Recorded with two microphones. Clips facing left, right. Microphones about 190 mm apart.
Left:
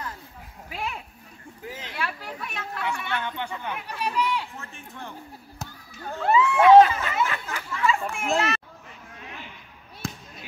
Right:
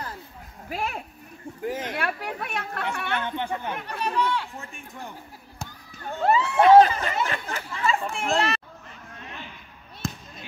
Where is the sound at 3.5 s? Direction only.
55° right (ahead or behind).